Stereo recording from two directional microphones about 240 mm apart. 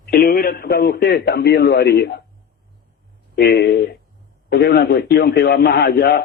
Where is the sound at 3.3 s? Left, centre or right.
Left.